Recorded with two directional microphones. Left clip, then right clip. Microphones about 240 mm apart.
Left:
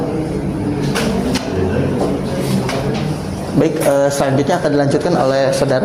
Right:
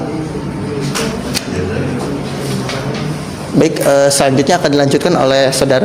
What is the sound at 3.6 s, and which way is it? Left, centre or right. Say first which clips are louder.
A woman's voice: right 3 dB; right.